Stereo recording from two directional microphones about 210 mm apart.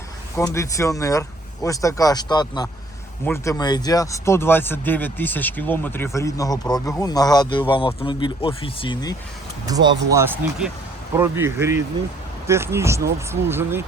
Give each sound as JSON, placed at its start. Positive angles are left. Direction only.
{"t": 0.3, "sound": "speech", "side_deg": 15}
{"t": 10.1, "sound": "speech", "side_deg": -10}